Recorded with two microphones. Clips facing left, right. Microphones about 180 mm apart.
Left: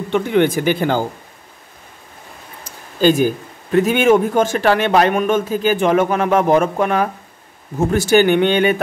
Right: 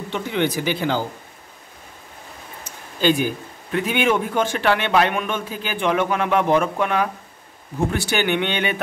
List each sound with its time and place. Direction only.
0.1 s a man's voice: 50° left (ahead or behind)
2.6 s a man's voice: 45° left (ahead or behind)